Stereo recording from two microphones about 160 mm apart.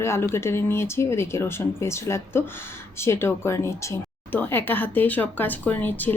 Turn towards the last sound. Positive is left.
turn(degrees=10)  # may be behind; listen again after turning